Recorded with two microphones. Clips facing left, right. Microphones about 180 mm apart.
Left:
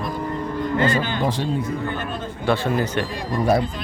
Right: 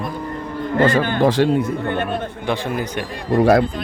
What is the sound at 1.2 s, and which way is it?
Speech, 85° right.